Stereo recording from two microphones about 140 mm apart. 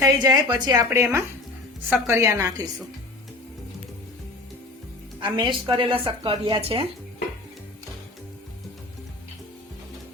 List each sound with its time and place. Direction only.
0.0 s a woman's voice: 25° right (ahead or behind)
5.2 s speech: 35° right (ahead or behind)